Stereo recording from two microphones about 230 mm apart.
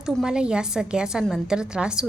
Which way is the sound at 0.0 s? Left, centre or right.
Centre.